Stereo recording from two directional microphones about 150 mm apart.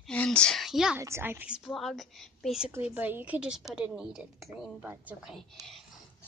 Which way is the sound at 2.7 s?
10° right (ahead or behind).